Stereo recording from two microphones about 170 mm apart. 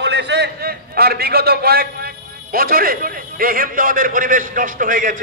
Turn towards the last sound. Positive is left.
turn(degrees=-50)  # may be behind; listen again after turning